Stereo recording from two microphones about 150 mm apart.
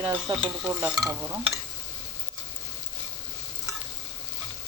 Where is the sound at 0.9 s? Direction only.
5° right (ahead or behind).